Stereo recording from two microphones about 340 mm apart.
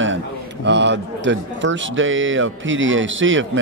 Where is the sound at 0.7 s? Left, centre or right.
Right.